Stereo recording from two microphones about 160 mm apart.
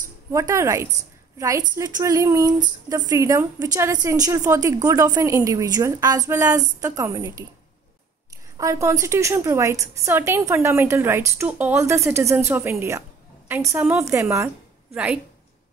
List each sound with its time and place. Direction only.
0.3 s a woman's voice: 20° right (ahead or behind)
8.5 s a woman's voice: 20° right (ahead or behind)